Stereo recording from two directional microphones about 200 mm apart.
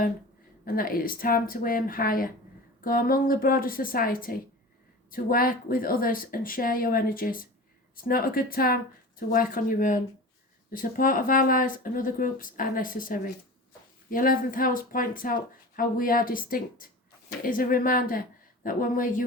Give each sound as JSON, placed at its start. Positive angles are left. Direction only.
{"t": 0.6, "sound": "speech", "side_deg": 45}